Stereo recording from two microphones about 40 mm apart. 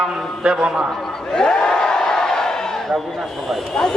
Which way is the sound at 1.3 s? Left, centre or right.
Centre.